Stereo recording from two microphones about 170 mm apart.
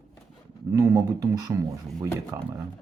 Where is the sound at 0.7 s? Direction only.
20° right (ahead or behind).